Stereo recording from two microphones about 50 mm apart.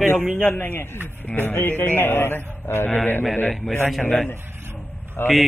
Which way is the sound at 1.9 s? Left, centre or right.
Left.